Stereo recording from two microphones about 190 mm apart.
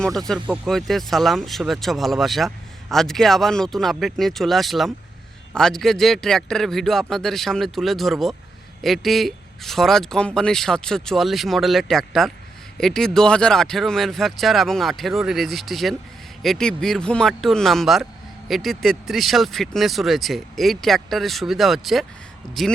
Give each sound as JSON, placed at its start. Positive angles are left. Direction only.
{"t": 0.0, "sound": "speech", "side_deg": 0}
{"t": 22.4, "sound": "speech", "side_deg": 25}